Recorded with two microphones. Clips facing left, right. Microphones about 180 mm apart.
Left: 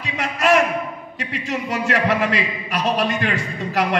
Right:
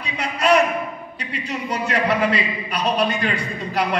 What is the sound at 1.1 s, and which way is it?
A man's voice, 85° left.